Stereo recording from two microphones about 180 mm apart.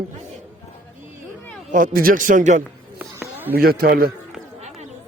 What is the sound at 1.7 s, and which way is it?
Speech, 50° right (ahead or behind).